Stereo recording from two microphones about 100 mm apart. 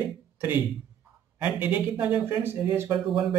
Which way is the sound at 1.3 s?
15° right (ahead or behind).